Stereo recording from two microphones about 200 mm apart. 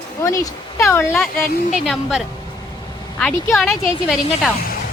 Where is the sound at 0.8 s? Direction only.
10° left (ahead or behind).